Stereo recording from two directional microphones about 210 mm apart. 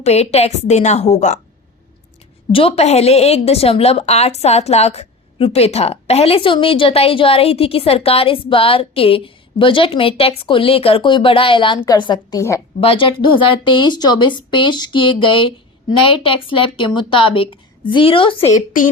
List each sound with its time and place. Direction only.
0.0 s a woman's voice: 30° left (ahead or behind)
2.5 s a woman's voice: 25° left (ahead or behind)
12.8 s a woman's voice: 25° left (ahead or behind)